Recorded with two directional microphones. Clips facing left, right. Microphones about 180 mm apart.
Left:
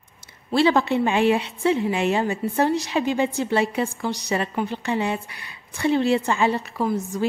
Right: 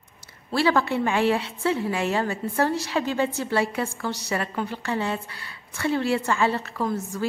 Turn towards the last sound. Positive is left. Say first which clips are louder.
# left 3 dB
turn(degrees=10)  # may be behind; listen again after turning